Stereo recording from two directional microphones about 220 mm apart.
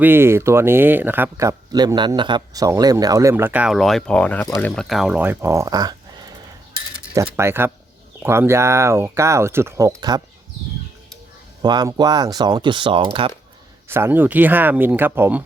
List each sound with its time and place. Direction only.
0.0 s speech: 10° right (ahead or behind); by 4.7 s 10° left (ahead or behind)
4.7 s speech: centre (ahead or behind); by 5.9 s 15° right (ahead or behind)
7.1 s speech: 15° right (ahead or behind)
11.6 s speech: 20° right (ahead or behind)
13.8 s speech: 10° right (ahead or behind)